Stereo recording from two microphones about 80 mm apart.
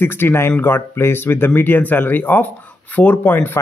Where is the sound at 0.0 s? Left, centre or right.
Left.